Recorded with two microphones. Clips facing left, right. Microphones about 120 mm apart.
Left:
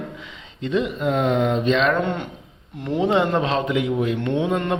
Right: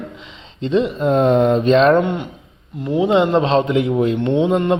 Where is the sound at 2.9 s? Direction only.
15° right (ahead or behind).